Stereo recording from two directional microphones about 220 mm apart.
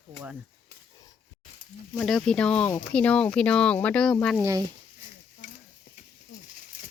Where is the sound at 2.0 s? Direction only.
5° left (ahead or behind).